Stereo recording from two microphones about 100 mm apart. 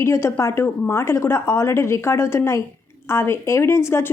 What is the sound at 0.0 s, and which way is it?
Speech, 25° left (ahead or behind).